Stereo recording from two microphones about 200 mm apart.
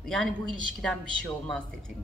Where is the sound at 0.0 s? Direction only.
Centre (ahead or behind).